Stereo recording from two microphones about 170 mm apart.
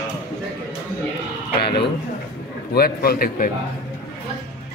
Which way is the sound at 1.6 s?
70° left (ahead or behind).